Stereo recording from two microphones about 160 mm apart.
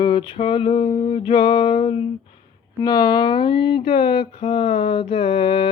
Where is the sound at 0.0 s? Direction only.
30° left (ahead or behind).